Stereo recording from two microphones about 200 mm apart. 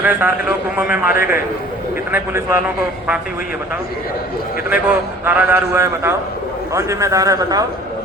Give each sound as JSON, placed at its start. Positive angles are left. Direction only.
{"t": 0.0, "sound": "a man's voice", "side_deg": -10}
{"t": 4.7, "sound": "a man's voice", "side_deg": -5}